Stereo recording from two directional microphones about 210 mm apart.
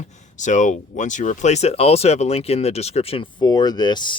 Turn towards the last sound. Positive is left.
turn(degrees=20)  # may be behind; listen again after turning